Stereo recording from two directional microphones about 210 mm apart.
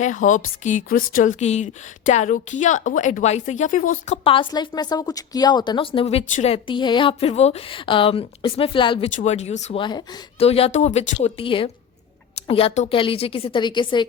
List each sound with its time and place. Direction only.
0.0 s a woman's voice: 35° left (ahead or behind)
4.2 s a woman's voice: 25° left (ahead or behind)